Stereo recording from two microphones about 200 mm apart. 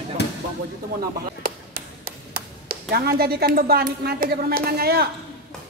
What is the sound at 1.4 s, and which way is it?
Tap, 45° right (ahead or behind).